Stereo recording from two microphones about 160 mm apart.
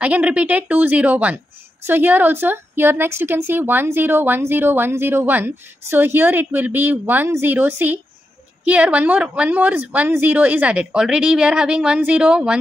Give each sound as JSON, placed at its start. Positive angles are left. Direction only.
{"t": 0.0, "sound": "a woman's voice", "side_deg": -10}